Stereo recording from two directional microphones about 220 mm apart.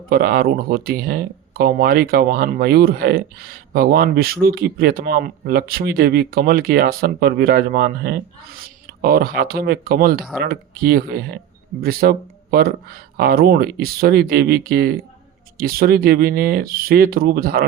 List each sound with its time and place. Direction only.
0.1 s speech: 45° right (ahead or behind)